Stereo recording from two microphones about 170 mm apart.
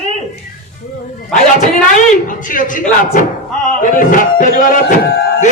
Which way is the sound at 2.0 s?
50° left (ahead or behind).